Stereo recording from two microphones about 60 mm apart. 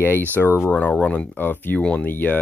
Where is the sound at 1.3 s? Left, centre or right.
Left.